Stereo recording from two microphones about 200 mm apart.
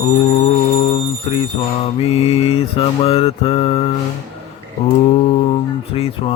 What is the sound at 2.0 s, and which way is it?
Mantra, 30° left (ahead or behind).